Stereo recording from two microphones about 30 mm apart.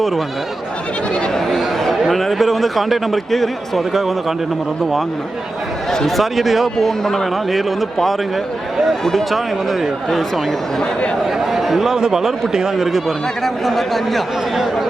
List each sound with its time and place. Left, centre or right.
1.5 s a man's voice: centre
6.1 s a man's voice: centre
6.7 s speech: centre
9.1 s a man's voice: centre
11.3 s speech: centre
11.9 s speech: right
12.8 s speech: centre
13.4 s a man's voice: centre
14.5 s speech: centre